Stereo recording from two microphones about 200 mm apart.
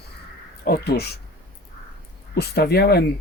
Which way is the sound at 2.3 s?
50° left (ahead or behind).